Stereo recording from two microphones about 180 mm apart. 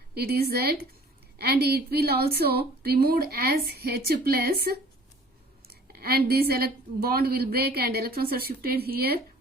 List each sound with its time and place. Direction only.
0.1 s a woman's voice: 60° right (ahead or behind)